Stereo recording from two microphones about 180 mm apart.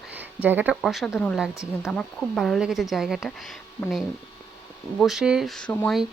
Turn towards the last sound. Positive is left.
turn(degrees=5)  # may be behind; listen again after turning